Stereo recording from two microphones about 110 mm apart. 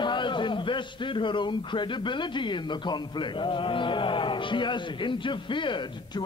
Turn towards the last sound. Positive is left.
turn(degrees=45)  # may be behind; listen again after turning